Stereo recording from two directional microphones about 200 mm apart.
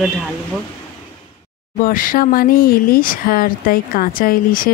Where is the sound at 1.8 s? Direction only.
45° left (ahead or behind).